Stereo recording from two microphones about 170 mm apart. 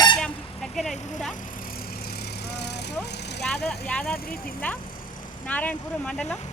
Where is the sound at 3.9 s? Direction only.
5° left (ahead or behind).